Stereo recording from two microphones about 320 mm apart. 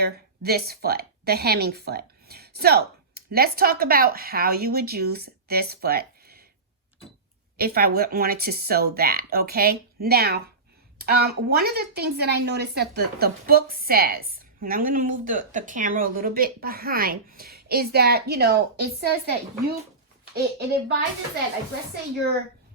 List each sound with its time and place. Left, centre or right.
0.0 s a woman's voice: right
7.5 s a woman's voice: right